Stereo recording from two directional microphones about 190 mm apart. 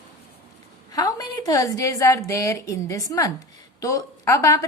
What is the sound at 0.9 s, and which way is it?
A woman's voice, 20° left (ahead or behind).